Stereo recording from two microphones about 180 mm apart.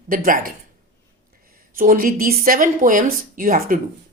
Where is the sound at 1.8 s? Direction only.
50° right (ahead or behind).